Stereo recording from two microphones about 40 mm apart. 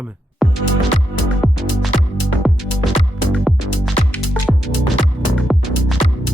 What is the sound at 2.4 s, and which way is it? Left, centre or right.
Music, centre.